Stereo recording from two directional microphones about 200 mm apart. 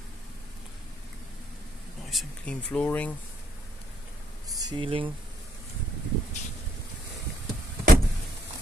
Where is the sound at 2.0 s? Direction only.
Centre (ahead or behind).